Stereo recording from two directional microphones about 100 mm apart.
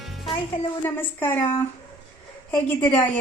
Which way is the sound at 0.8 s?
20° left (ahead or behind).